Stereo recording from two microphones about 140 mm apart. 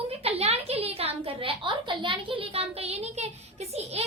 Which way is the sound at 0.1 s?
45° right (ahead or behind).